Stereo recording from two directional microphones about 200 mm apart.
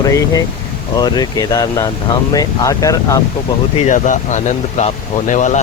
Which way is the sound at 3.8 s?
40° left (ahead or behind).